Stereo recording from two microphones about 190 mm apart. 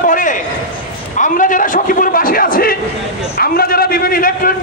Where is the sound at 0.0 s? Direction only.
45° left (ahead or behind).